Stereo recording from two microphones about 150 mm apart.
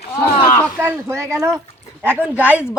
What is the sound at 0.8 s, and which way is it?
A woman's voice, 15° right (ahead or behind).